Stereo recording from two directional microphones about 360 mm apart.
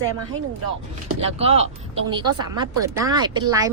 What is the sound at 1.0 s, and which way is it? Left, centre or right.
Speech, centre.